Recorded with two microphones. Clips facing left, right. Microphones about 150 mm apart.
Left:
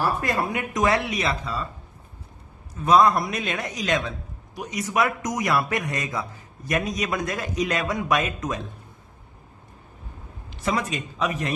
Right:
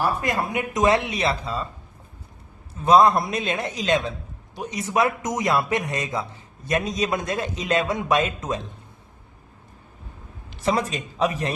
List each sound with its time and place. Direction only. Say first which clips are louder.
0.0 s a man's voice: even; 20° right (ahead or behind)
2.8 s a man's voice: right 2 dB; 25° right (ahead or behind)
10.7 s speech: right 2 dB; 35° right (ahead or behind)